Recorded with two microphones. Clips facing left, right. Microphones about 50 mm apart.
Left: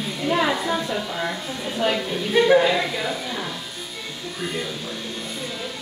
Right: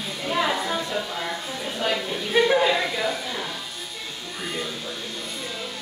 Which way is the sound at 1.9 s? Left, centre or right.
Centre.